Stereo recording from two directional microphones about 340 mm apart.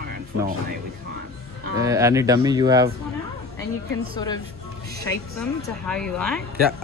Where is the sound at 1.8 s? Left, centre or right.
Centre.